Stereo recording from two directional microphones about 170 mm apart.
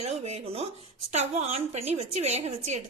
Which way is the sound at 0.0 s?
40° right (ahead or behind).